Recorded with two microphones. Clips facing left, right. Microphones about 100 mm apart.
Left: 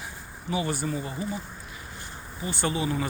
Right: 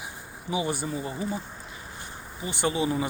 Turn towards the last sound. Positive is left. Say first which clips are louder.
# right 2 dB
turn(degrees=-25)  # may be behind; listen again after turning